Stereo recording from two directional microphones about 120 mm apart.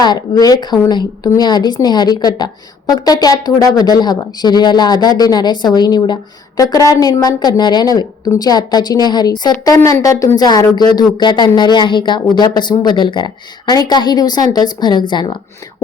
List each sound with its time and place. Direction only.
0.0 s a woman's voice: 35° left (ahead or behind)